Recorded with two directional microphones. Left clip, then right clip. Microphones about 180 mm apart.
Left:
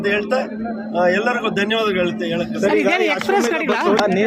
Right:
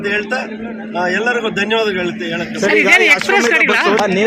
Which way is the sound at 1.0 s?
25° left (ahead or behind).